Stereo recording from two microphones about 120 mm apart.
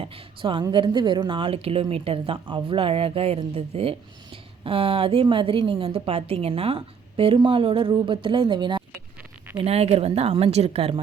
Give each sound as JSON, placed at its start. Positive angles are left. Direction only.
{"t": 0.0, "sound": "a woman's voice", "side_deg": -50}
{"t": 9.6, "sound": "a woman's voice", "side_deg": -55}